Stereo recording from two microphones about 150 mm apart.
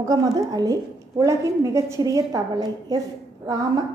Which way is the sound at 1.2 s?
20° right (ahead or behind).